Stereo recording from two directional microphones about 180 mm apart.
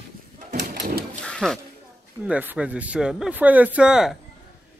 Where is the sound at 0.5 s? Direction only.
50° right (ahead or behind).